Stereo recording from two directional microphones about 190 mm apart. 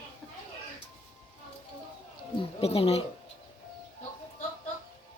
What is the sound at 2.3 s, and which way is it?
Speech, 30° left (ahead or behind).